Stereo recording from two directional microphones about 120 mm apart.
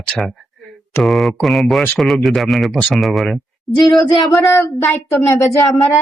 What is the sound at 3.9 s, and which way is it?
Speech, 30° left (ahead or behind).